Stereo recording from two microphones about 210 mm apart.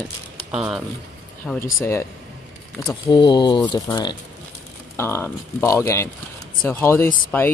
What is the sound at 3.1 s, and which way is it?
Speech, 20° left (ahead or behind).